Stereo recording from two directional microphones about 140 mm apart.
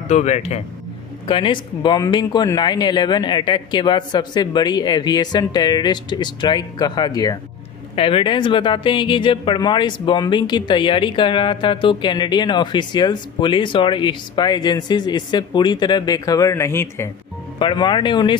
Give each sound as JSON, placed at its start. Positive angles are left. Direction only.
{"t": 0.1, "sound": "speech", "side_deg": 55}
{"t": 1.2, "sound": "speech", "side_deg": 35}
{"t": 7.9, "sound": "speech", "side_deg": 40}
{"t": 17.6, "sound": "speech", "side_deg": 35}